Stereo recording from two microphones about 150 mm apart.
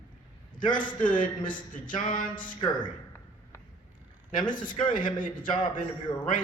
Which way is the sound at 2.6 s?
30° left (ahead or behind).